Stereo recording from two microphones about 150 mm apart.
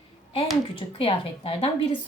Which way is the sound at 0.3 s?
35° left (ahead or behind).